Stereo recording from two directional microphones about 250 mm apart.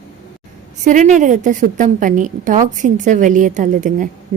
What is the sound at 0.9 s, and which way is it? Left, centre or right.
A woman's voice, right.